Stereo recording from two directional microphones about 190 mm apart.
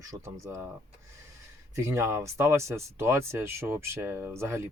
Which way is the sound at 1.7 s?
15° right (ahead or behind).